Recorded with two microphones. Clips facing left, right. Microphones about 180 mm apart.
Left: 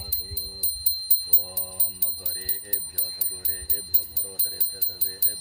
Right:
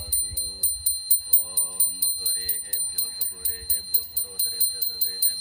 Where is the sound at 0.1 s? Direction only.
65° left (ahead or behind).